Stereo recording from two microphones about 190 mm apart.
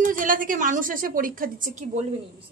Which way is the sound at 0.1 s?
45° right (ahead or behind).